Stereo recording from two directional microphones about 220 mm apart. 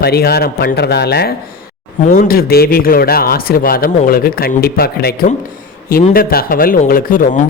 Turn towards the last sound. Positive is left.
turn(degrees=40)  # may be behind; listen again after turning